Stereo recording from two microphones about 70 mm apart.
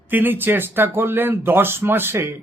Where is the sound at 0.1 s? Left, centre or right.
Right.